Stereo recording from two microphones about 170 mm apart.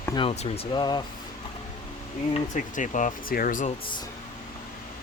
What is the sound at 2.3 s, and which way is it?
Speech, 50° left (ahead or behind).